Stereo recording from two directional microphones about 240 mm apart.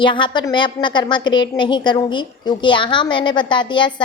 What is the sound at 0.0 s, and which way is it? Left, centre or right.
A woman's voice, centre.